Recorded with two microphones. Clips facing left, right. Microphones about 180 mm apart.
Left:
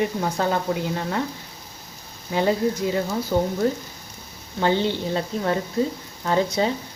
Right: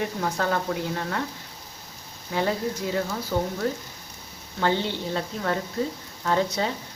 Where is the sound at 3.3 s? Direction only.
25° left (ahead or behind).